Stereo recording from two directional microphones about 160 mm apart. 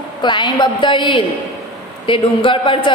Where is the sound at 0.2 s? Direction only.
30° left (ahead or behind).